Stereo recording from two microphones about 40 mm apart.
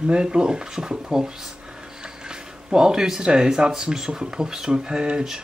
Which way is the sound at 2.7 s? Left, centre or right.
Centre.